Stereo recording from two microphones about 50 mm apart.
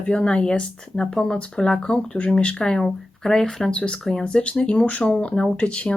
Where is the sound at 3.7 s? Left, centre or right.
Left.